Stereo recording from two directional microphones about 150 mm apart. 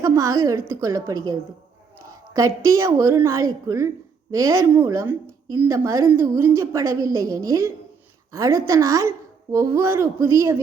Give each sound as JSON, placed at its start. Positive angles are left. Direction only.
{"t": 0.0, "sound": "a woman's voice", "side_deg": -20}